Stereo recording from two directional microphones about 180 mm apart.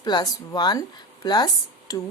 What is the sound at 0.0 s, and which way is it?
A woman's voice, 25° left (ahead or behind).